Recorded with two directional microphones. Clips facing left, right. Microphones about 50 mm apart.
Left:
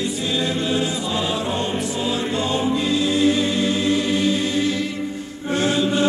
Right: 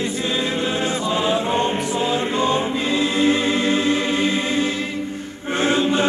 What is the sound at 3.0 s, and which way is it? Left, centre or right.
Choir, right.